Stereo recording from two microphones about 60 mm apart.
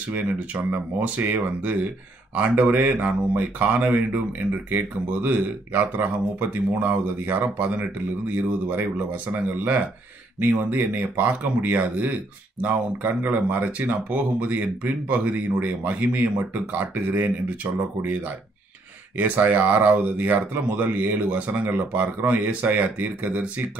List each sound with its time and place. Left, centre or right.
0.1 s speech: right